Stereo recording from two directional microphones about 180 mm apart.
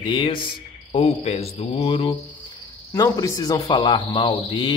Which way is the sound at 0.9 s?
35° left (ahead or behind).